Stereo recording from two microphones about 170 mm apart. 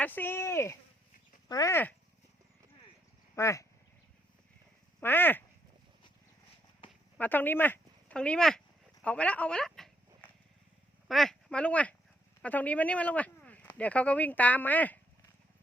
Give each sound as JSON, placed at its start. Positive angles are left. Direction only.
{"t": 0.0, "sound": "speech", "side_deg": 10}
{"t": 3.3, "sound": "speech", "side_deg": 20}
{"t": 4.9, "sound": "speech", "side_deg": 10}
{"t": 7.2, "sound": "a sound", "side_deg": 10}
{"t": 11.1, "sound": "speech", "side_deg": 0}